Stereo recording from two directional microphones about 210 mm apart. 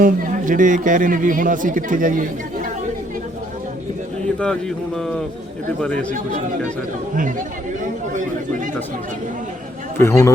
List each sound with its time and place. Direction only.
0.0 s a man's voice: 40° right (ahead or behind)
5.8 s speech: 5° left (ahead or behind)
10.0 s speech: 15° left (ahead or behind)